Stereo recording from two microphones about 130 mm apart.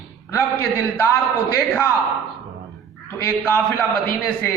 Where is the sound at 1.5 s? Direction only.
20° left (ahead or behind).